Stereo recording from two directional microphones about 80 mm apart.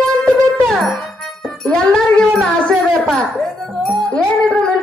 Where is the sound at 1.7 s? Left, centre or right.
Centre.